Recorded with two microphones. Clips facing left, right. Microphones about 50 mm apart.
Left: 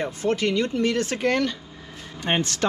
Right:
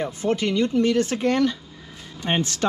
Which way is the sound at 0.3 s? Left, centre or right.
Left.